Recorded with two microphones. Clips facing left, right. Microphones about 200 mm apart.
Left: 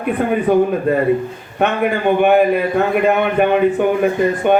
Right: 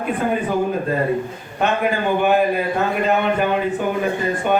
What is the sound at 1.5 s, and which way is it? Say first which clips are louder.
Speech: left 3 dB; 60° left (ahead or behind).